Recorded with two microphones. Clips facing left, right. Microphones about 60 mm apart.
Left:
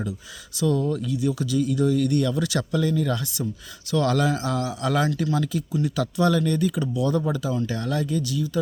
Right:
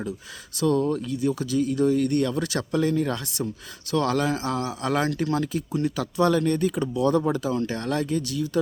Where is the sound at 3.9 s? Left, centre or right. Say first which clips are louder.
Left 1 dB; right.